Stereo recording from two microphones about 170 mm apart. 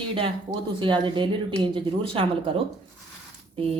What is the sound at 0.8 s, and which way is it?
Speech, 30° right (ahead or behind).